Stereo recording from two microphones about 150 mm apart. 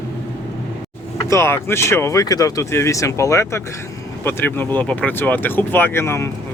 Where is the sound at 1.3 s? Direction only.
15° left (ahead or behind).